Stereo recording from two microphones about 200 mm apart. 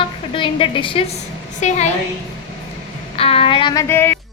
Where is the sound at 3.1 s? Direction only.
30° left (ahead or behind); by 4.2 s 10° left (ahead or behind).